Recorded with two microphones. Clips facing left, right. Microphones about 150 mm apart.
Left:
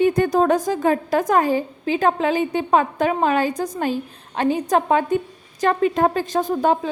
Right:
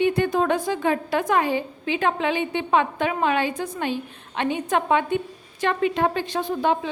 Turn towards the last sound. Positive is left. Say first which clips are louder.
# left 4 dB
turn(degrees=45)  # may be behind; listen again after turning